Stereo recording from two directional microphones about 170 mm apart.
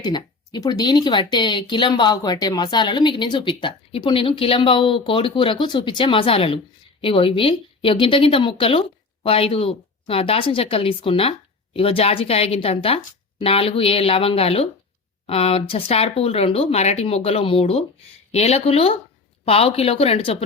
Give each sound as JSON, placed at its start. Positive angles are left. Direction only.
{"t": 0.0, "sound": "speech", "side_deg": 25}